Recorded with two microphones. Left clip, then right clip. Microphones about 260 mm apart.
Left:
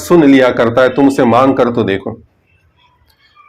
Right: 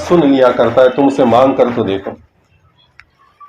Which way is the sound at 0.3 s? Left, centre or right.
Left.